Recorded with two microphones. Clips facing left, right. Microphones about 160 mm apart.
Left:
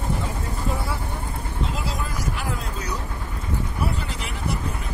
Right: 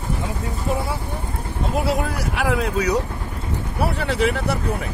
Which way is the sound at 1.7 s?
65° right (ahead or behind).